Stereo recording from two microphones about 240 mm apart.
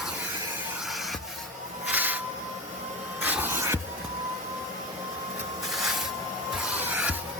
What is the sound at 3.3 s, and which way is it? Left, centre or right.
Music, centre.